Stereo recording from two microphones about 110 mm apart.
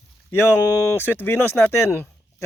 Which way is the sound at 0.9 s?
20° left (ahead or behind).